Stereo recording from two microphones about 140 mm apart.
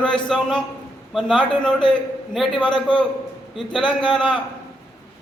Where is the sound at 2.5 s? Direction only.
35° left (ahead or behind).